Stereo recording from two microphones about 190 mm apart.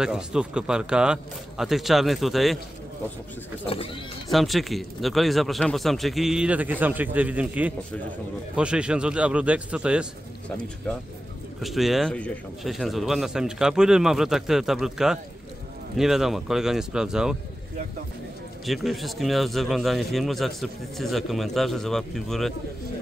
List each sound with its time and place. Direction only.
0.0 s a man's voice: 5° right (ahead or behind)
3.6 s speech: 30° left (ahead or behind)
4.3 s a man's voice: centre (ahead or behind)
11.6 s a man's voice: centre (ahead or behind)
18.7 s a man's voice: centre (ahead or behind)